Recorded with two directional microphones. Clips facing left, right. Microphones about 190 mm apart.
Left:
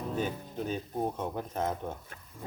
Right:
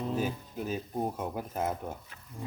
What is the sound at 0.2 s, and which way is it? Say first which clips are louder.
Speech: even; 5° right (ahead or behind).